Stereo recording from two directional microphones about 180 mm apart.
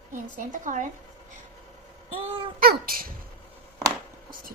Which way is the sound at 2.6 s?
55° right (ahead or behind).